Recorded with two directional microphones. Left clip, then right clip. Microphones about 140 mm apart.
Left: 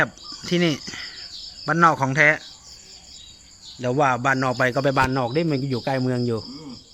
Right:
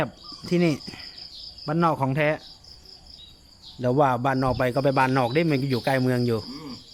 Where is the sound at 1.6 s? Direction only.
5° right (ahead or behind).